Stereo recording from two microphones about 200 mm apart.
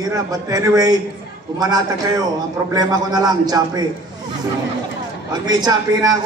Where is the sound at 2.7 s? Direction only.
20° right (ahead or behind).